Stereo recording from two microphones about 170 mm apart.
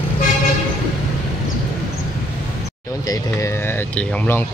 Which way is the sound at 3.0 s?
20° left (ahead or behind).